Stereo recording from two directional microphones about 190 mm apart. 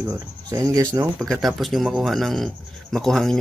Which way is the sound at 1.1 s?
5° left (ahead or behind).